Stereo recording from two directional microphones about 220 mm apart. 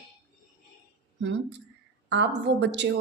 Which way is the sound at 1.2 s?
55° right (ahead or behind).